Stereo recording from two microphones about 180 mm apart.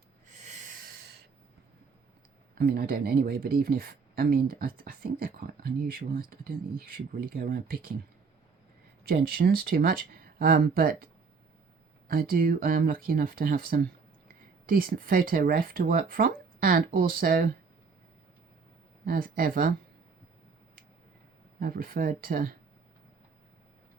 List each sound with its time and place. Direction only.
2.6 s speech: 55° right (ahead or behind)
9.0 s speech: 55° right (ahead or behind)
19.0 s speech: 55° right (ahead or behind)
21.6 s speech: 55° right (ahead or behind)